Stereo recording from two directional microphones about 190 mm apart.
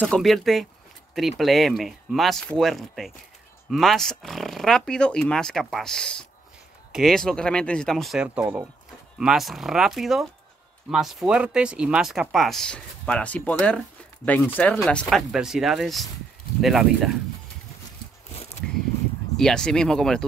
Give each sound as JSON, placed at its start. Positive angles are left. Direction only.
{"t": 0.1, "sound": "speech", "side_deg": 0}
{"t": 19.3, "sound": "speech", "side_deg": 5}